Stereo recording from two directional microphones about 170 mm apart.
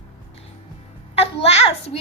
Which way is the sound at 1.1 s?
35° left (ahead or behind).